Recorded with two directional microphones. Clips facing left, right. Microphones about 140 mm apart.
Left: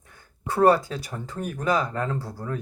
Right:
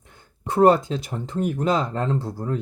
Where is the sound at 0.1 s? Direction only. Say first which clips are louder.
Right 3 dB; 20° right (ahead or behind).